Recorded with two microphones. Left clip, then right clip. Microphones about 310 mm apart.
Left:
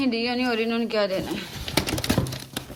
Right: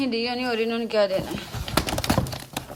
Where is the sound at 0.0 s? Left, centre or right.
Centre.